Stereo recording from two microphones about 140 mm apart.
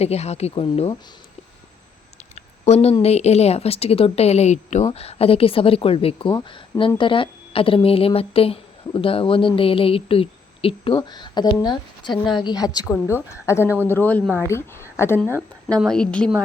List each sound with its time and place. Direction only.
0.0 s speech: 50° left (ahead or behind)
2.3 s a sound: 50° left (ahead or behind)
3.0 s a woman's voice: 50° left (ahead or behind); by 15.2 s 20° left (ahead or behind)
15.8 s a woman's voice: 5° left (ahead or behind)